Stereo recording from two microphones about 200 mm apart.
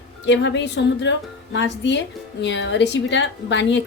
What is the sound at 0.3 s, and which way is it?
Speech, 65° left (ahead or behind).